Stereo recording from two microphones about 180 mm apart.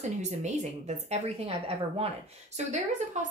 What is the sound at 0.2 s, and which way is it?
Speech, 40° right (ahead or behind).